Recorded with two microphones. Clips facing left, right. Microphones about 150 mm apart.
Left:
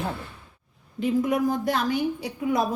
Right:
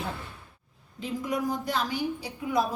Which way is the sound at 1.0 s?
55° left (ahead or behind).